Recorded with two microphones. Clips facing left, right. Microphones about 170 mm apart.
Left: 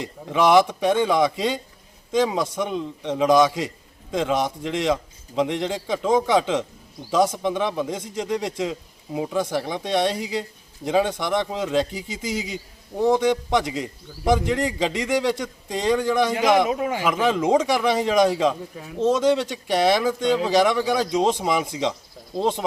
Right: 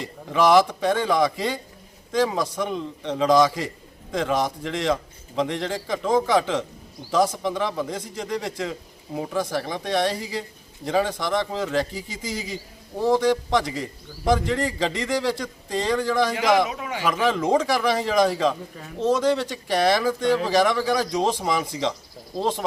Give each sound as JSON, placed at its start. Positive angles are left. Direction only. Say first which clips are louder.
{"t": 0.0, "sound": "a man's voice", "louder": "even", "side_deg": 20}
{"t": 16.6, "sound": "a man's voice", "louder": "left 7 dB", "side_deg": 35}
{"t": 17.0, "sound": "a man's voice", "louder": "right 2 dB", "side_deg": 15}